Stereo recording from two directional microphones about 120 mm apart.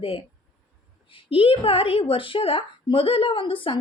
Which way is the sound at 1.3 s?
50° left (ahead or behind).